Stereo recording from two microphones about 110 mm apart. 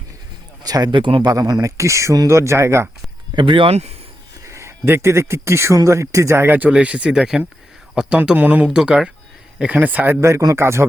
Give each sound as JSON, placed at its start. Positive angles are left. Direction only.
{"t": 0.6, "sound": "speech", "side_deg": -35}
{"t": 1.3, "sound": "speech", "side_deg": -35}
{"t": 3.3, "sound": "speech", "side_deg": -50}
{"t": 4.4, "sound": "speech", "side_deg": -25}